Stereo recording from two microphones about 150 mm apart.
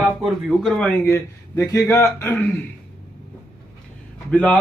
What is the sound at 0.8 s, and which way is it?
Speech, 10° left (ahead or behind).